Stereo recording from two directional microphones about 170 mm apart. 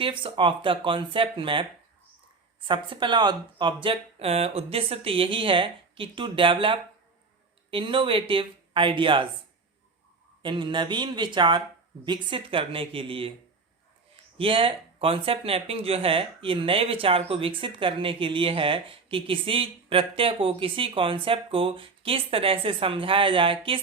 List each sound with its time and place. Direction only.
0.0 s speech: 30° right (ahead or behind)
2.6 s speech: 30° right (ahead or behind)
10.4 s speech: 30° right (ahead or behind)
14.3 s speech: 30° right (ahead or behind)